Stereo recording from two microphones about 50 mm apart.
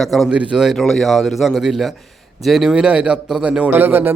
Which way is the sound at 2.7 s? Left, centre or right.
Centre.